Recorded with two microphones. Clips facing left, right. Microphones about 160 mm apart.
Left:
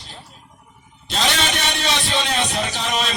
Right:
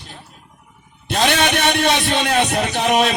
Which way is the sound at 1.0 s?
60° right (ahead or behind).